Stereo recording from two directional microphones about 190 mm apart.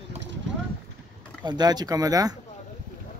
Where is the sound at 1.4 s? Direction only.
20° right (ahead or behind).